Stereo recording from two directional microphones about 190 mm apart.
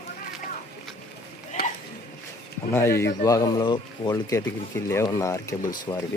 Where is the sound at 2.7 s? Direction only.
15° left (ahead or behind).